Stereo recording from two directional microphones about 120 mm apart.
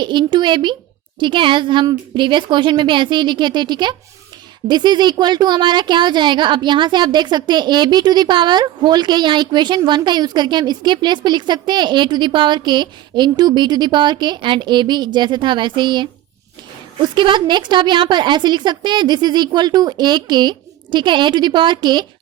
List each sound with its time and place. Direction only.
0.0 s a woman's voice: 40° right (ahead or behind)